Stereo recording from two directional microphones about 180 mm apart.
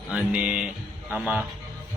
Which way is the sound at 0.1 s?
5° right (ahead or behind).